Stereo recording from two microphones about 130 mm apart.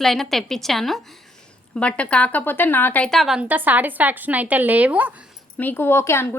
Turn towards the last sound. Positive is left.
turn(degrees=20)  # may be behind; listen again after turning